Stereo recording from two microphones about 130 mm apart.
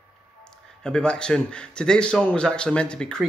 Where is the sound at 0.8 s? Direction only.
5° left (ahead or behind).